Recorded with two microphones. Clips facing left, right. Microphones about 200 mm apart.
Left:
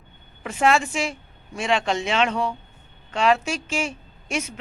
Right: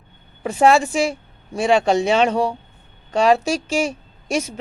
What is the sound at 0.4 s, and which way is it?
Speech, 35° right (ahead or behind).